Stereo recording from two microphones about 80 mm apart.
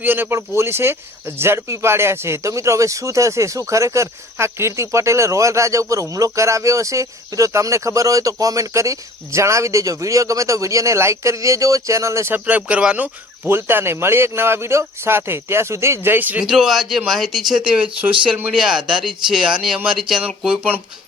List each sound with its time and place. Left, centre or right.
0.0 s speech: right
12.3 s speech: centre
13.5 s speech: right
16.4 s speech: centre